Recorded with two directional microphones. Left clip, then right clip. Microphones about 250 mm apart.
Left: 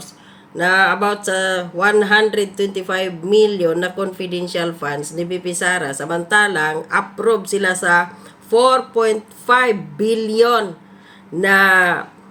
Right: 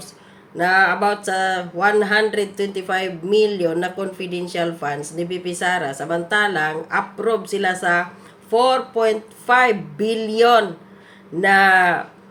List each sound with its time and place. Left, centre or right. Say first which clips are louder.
0.5 s speech: left 2 dB; centre